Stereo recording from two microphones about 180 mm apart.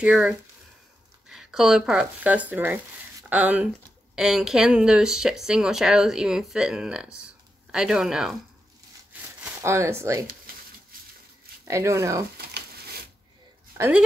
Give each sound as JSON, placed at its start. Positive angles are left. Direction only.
{"t": 0.0, "sound": "speech", "side_deg": -5}
{"t": 9.4, "sound": "speech", "side_deg": -15}
{"t": 10.2, "sound": "a sound", "side_deg": -50}
{"t": 11.6, "sound": "speech", "side_deg": -15}
{"t": 12.4, "sound": "a sound", "side_deg": -60}
{"t": 13.7, "sound": "speech", "side_deg": -10}